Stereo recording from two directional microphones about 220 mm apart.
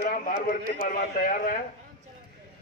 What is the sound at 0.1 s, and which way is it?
A man's voice, 35° left (ahead or behind).